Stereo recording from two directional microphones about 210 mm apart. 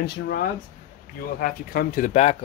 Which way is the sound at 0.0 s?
50° left (ahead or behind).